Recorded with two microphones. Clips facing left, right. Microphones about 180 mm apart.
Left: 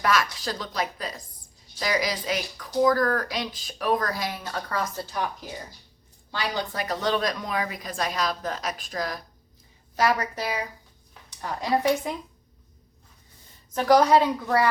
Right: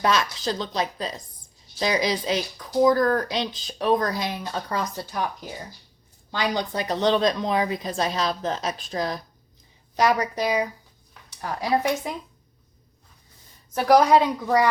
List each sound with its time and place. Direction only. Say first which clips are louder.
0.0 s speech: right 2 dB; 20° right (ahead or behind)
6.3 s a woman's voice: right 4 dB; 20° right (ahead or behind)
13.7 s a woman's voice: right 1 dB; 10° right (ahead or behind)